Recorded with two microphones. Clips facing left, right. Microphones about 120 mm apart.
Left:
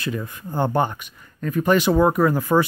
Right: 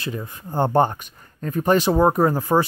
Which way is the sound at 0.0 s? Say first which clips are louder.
Left 2 dB; 25° right (ahead or behind).